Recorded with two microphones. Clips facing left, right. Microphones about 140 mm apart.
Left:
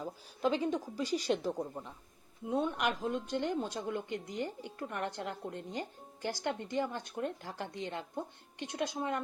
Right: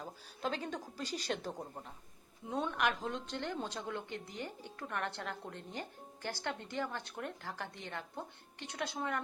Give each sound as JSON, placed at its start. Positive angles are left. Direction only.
{"t": 0.5, "sound": "speech", "side_deg": 10}
{"t": 2.5, "sound": "speech", "side_deg": 10}